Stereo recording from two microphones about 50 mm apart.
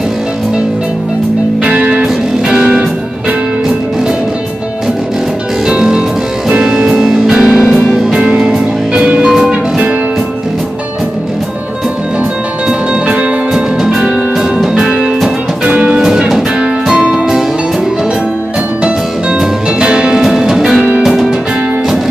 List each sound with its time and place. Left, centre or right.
1.6 s music: right
5.7 s music: centre
12.6 s music: right
14.9 s music: right
19.8 s music: centre
20.2 s music: centre